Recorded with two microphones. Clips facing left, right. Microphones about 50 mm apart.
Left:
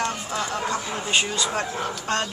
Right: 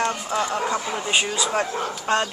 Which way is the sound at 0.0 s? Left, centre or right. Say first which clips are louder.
Right 3 dB; right.